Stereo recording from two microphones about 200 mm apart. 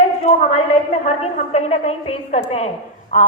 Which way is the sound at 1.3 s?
30° left (ahead or behind).